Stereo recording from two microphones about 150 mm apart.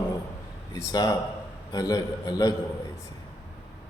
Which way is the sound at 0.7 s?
25° left (ahead or behind).